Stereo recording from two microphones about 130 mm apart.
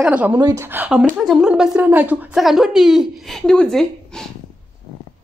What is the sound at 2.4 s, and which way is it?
A woman's voice, centre (ahead or behind).